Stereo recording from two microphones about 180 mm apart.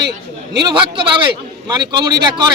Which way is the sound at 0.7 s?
25° right (ahead or behind).